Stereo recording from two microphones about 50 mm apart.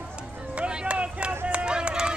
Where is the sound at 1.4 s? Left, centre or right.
Right.